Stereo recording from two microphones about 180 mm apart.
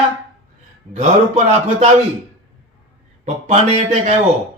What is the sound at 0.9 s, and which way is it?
Speech, 45° right (ahead or behind).